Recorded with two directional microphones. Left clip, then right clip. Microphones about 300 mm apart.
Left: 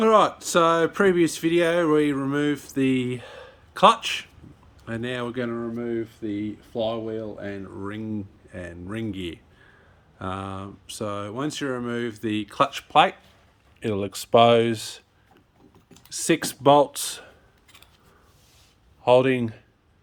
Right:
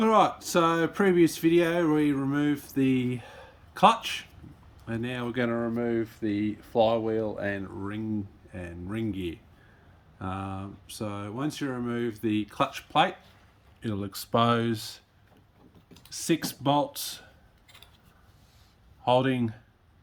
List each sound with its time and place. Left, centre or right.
0.0 s speech: centre
19.0 s speech: centre